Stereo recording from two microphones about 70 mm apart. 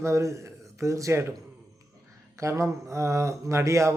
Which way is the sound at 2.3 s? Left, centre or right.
Right.